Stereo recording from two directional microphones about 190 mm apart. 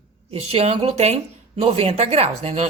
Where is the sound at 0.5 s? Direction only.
30° right (ahead or behind).